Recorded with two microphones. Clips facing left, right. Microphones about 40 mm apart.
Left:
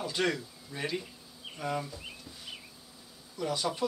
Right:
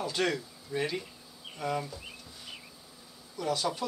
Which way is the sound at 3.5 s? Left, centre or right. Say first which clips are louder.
Right 1 dB; centre.